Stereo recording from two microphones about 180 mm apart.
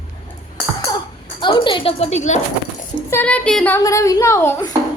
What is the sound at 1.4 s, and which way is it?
Speech, 25° left (ahead or behind).